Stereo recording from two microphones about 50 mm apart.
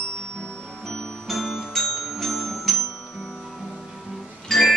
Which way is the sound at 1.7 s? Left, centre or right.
Centre.